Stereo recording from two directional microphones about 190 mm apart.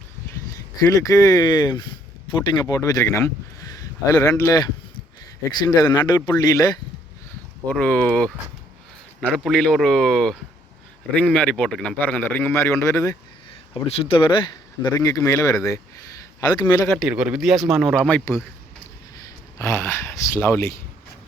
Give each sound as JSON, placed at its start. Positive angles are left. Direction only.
{"t": 0.8, "sound": "speech", "side_deg": 15}
{"t": 7.7, "sound": "a man's voice", "side_deg": 5}
{"t": 9.3, "sound": "a man's voice", "side_deg": 5}
{"t": 13.7, "sound": "a man's voice", "side_deg": 30}
{"t": 17.0, "sound": "speech", "side_deg": -5}
{"t": 19.5, "sound": "a man's voice", "side_deg": 15}